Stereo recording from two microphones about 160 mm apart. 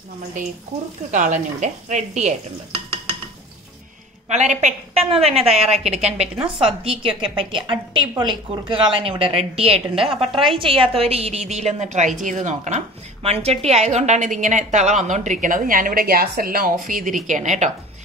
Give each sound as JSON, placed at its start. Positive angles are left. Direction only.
{"t": 1.1, "sound": "a woman's voice", "side_deg": -50}
{"t": 4.3, "sound": "a woman's voice", "side_deg": -50}
{"t": 9.9, "sound": "a woman's voice", "side_deg": 0}
{"t": 10.6, "sound": "a woman's voice", "side_deg": -35}
{"t": 16.8, "sound": "a woman's voice", "side_deg": -55}